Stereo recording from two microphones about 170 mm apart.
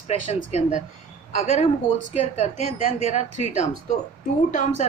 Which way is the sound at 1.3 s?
40° left (ahead or behind).